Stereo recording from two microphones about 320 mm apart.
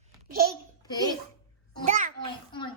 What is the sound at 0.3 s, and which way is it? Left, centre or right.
Babbling, right.